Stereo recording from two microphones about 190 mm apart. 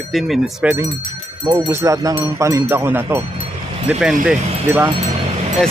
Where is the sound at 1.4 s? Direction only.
20° right (ahead or behind).